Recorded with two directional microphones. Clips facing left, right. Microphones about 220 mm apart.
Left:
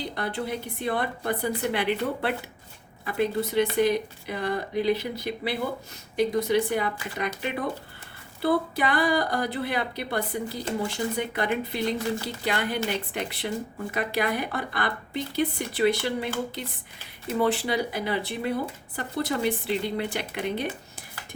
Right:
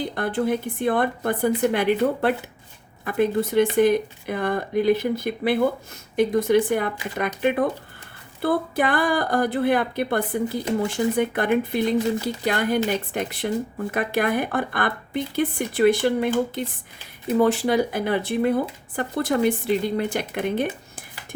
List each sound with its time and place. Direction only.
0.1 s speech: 50° right (ahead or behind)